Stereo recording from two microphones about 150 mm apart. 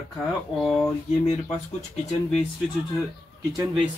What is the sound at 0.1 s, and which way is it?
Speech, centre (ahead or behind).